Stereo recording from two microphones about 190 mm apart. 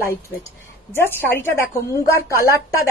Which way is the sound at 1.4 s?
15° left (ahead or behind).